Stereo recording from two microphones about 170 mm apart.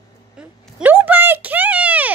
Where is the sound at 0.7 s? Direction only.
10° right (ahead or behind).